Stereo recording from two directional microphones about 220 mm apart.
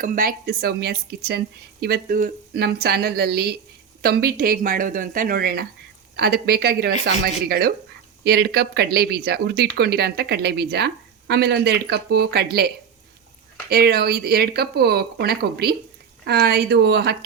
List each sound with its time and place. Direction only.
0.0 s speech: 40° right (ahead or behind)